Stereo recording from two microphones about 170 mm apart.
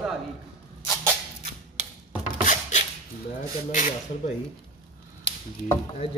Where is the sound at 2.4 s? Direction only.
45° left (ahead or behind).